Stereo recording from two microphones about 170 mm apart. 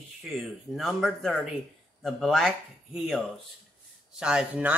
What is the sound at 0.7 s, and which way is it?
Speech, centre (ahead or behind).